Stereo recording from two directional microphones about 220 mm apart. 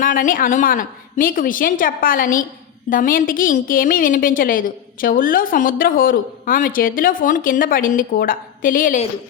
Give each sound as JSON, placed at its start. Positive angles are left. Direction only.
{"t": 0.0, "sound": "a woman's voice", "side_deg": 40}